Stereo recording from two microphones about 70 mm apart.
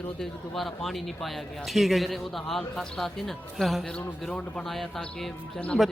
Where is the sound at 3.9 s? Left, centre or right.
Centre.